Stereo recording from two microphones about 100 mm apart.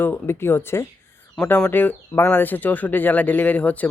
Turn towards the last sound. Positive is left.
turn(degrees=15)  # may be behind; listen again after turning